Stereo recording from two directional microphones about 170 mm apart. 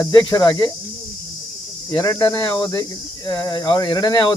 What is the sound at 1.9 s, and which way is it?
Speech, 20° left (ahead or behind).